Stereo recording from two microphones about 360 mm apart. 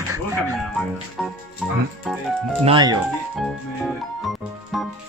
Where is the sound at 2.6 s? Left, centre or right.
Centre.